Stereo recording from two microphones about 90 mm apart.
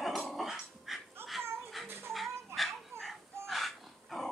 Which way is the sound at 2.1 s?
Centre (ahead or behind).